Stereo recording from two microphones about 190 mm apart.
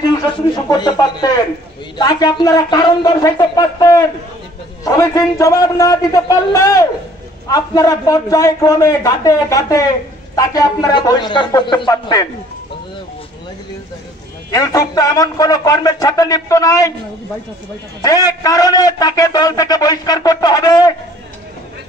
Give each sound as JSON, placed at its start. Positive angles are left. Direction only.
{"t": 0.7, "sound": "a man's voice", "side_deg": 20}
{"t": 14.5, "sound": "a man's voice", "side_deg": 20}
{"t": 18.0, "sound": "a man's voice", "side_deg": 20}